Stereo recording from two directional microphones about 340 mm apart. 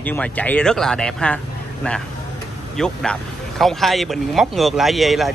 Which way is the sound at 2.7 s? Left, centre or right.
Centre.